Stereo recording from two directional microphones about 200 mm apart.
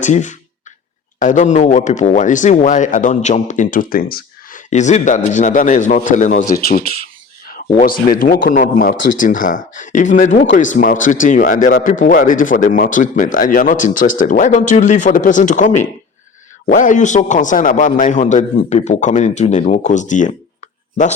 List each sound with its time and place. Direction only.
0.0 s speech: 35° left (ahead or behind)